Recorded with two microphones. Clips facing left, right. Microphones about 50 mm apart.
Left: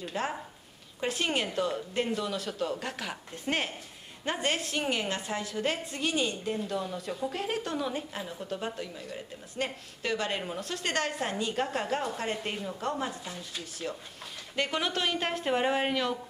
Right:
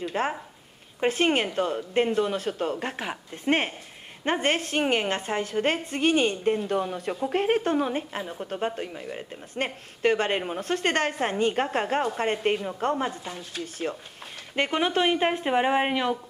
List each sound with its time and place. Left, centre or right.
0.2 s a woman's voice: right
14.5 s speech: right